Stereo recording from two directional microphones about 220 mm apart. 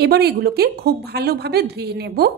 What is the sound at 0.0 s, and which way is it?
A woman's voice, 45° right (ahead or behind).